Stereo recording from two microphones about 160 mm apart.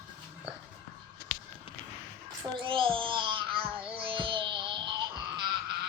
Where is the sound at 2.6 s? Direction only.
35° right (ahead or behind).